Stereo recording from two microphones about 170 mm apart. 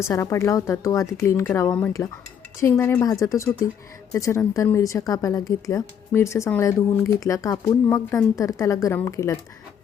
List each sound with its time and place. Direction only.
0.0 s speech: 15° left (ahead or behind)